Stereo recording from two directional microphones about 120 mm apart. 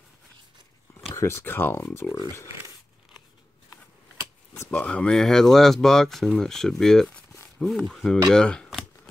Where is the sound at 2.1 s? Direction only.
30° left (ahead or behind).